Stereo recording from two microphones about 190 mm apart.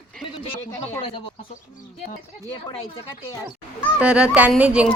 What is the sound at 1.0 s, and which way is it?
Speech, 30° left (ahead or behind).